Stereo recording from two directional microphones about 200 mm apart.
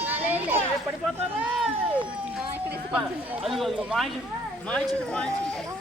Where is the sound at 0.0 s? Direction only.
10° right (ahead or behind).